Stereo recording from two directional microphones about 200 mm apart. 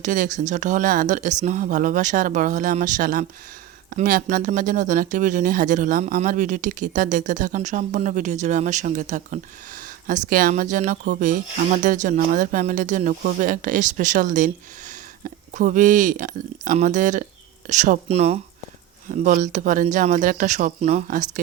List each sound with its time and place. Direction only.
0.0 s speech: 40° right (ahead or behind)